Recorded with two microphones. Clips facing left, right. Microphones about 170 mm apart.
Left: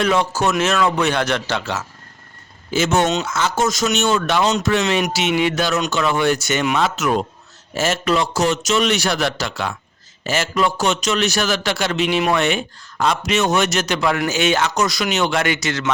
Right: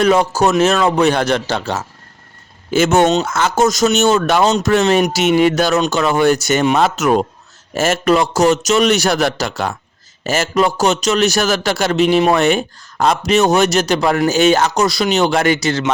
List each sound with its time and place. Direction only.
0.0 s a man's voice: 40° right (ahead or behind)
2.6 s a man's voice: 55° right (ahead or behind); by 15.8 s 35° right (ahead or behind)